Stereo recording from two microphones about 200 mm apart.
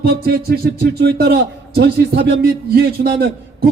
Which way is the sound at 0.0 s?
50° right (ahead or behind).